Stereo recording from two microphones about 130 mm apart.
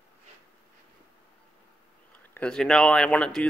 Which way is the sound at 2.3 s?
10° left (ahead or behind).